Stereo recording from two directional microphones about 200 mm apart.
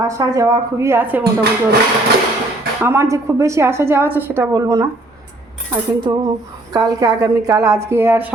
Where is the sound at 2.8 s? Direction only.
15° right (ahead or behind).